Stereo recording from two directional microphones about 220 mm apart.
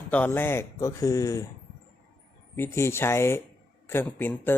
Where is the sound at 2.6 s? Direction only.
10° left (ahead or behind).